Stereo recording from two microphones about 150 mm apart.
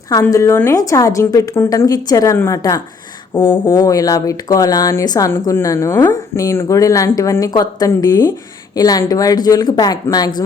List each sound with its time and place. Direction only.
0.1 s speech: 25° left (ahead or behind)